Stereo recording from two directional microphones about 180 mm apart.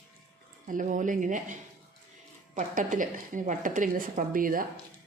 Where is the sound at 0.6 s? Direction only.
45° right (ahead or behind).